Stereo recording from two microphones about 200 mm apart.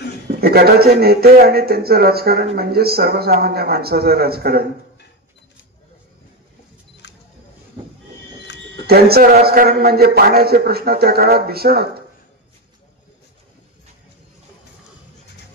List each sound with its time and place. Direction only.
0.3 s a man's voice: 50° right (ahead or behind)
7.0 s camera: 60° left (ahead or behind)
8.8 s a man's voice: 50° right (ahead or behind)